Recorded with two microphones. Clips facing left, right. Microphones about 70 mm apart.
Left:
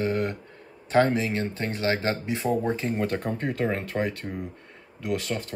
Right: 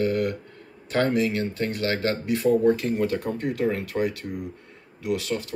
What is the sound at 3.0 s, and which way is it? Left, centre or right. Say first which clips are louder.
Speech: right 2 dB; left.